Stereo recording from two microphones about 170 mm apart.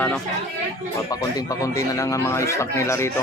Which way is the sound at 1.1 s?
20° left (ahead or behind).